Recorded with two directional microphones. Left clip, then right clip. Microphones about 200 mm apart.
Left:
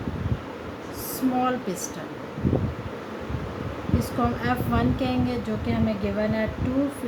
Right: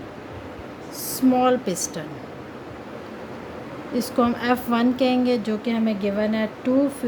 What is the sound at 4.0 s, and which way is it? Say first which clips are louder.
Speech: right 5 dB; 45° right (ahead or behind).